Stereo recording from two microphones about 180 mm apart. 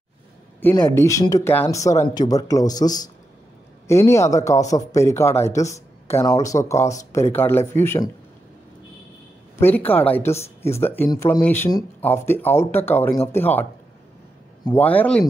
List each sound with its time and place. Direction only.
0.6 s a man's voice: 10° left (ahead or behind)
9.6 s speech: 10° left (ahead or behind)